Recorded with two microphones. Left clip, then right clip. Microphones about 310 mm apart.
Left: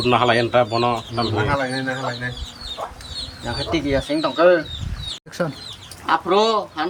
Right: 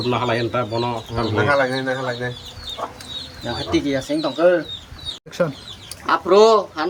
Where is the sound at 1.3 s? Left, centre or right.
Right.